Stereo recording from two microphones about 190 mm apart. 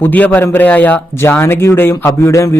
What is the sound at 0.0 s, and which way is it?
A man's voice, 10° left (ahead or behind).